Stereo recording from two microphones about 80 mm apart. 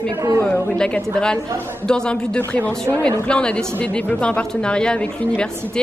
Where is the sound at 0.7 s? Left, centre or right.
Centre.